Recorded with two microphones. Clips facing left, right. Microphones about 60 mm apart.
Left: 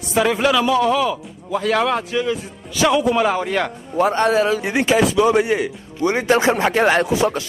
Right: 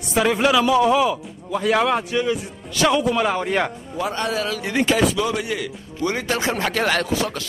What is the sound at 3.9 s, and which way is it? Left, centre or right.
Speech, left.